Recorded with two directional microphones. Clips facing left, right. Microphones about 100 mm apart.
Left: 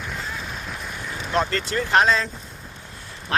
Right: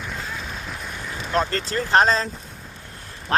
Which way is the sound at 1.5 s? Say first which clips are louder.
Even; 35° right (ahead or behind).